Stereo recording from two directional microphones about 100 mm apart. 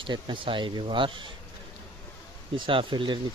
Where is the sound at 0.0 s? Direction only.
55° right (ahead or behind).